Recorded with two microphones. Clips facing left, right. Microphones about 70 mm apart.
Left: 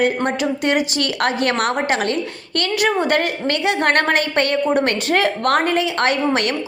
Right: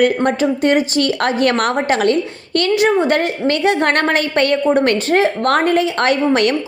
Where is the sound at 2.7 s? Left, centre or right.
Right.